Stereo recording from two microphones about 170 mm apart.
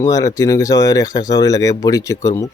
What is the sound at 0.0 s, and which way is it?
Speech, 20° left (ahead or behind).